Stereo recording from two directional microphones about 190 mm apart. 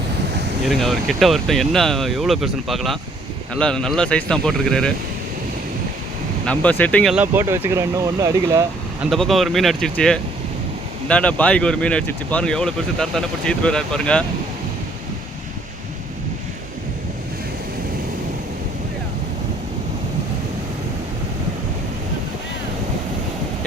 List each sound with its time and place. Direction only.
0.7 s speech: centre (ahead or behind)
6.4 s speech: 5° left (ahead or behind)
7.3 s speech: 15° right (ahead or behind)
9.0 s speech: centre (ahead or behind)